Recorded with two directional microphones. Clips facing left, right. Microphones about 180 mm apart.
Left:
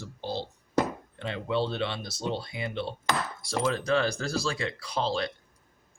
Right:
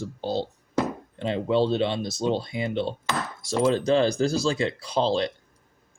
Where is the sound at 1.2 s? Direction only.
25° right (ahead or behind).